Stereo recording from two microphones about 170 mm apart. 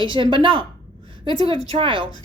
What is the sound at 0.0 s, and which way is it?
Speech, 30° right (ahead or behind).